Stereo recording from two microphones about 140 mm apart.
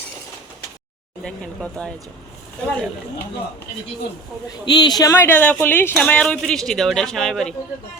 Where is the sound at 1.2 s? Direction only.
5° left (ahead or behind).